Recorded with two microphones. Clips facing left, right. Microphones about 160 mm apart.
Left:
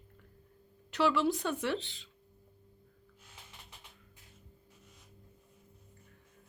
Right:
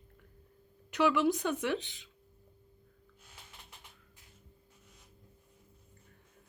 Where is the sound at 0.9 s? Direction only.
15° right (ahead or behind).